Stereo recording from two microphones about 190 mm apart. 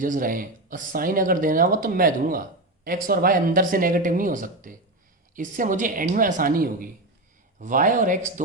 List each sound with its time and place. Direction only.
0.0 s speech: 45° right (ahead or behind)